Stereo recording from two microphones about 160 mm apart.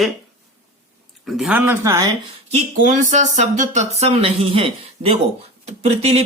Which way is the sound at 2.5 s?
45° right (ahead or behind).